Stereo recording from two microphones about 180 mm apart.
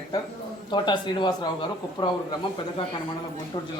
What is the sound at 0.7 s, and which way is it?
Speech, 25° left (ahead or behind).